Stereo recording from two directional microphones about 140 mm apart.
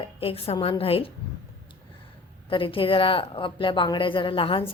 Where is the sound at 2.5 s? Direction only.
40° left (ahead or behind).